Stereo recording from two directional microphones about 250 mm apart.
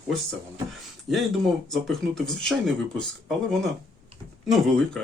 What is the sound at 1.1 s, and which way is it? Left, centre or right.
Speech, centre.